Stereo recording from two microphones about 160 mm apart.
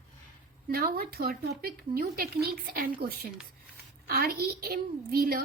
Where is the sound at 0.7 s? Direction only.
70° right (ahead or behind).